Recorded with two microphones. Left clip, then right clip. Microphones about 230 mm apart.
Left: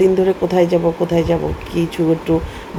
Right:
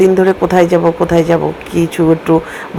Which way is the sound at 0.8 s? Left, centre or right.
Centre.